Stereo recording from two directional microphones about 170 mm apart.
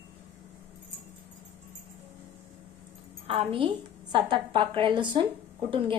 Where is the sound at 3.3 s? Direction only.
30° right (ahead or behind).